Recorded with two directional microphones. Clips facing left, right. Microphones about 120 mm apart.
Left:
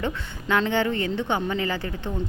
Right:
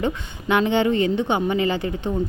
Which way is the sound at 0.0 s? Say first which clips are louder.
Right 4 dB; 15° right (ahead or behind).